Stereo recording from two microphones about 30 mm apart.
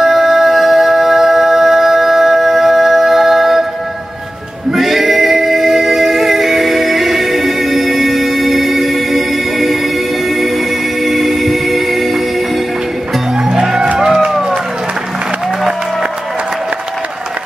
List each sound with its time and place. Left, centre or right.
0.0 s music: centre
4.7 s music: centre
11.1 s music: centre
13.4 s music: right
14.2 s run: centre